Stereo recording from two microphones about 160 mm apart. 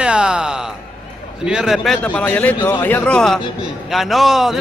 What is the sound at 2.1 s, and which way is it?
A man's voice, 10° left (ahead or behind).